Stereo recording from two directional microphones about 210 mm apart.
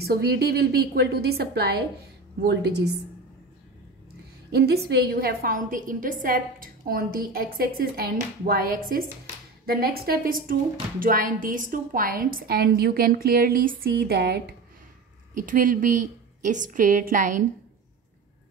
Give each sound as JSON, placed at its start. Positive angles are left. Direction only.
{"t": 0.0, "sound": "a woman's voice", "side_deg": -50}
{"t": 4.6, "sound": "a woman's voice", "side_deg": -50}